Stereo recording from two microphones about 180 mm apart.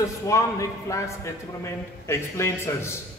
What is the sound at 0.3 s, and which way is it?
A man's voice, 15° left (ahead or behind).